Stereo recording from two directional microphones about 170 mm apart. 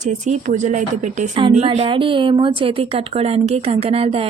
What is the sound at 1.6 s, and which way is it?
A woman's voice, 35° right (ahead or behind).